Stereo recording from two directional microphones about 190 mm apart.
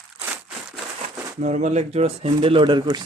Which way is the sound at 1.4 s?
40° right (ahead or behind).